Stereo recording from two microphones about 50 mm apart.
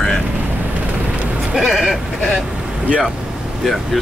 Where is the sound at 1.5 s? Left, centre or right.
Centre.